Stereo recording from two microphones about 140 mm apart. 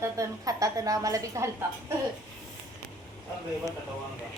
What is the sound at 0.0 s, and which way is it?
A woman's voice, 25° right (ahead or behind).